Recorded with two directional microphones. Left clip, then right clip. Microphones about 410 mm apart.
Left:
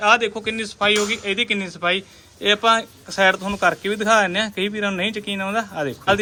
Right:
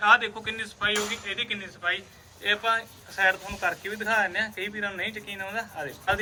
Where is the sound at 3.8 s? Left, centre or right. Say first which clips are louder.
Left 6 dB; left.